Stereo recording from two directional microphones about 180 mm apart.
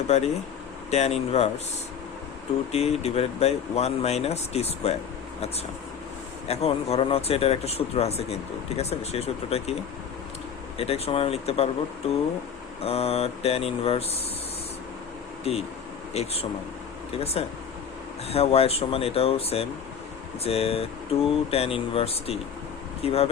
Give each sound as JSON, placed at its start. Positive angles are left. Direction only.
{"t": 0.1, "sound": "speech", "side_deg": 40}
{"t": 2.7, "sound": "speech", "side_deg": 35}
{"t": 6.5, "sound": "speech", "side_deg": 35}
{"t": 10.8, "sound": "speech", "side_deg": 35}
{"t": 12.8, "sound": "speech", "side_deg": 35}
{"t": 15.5, "sound": "speech", "side_deg": 35}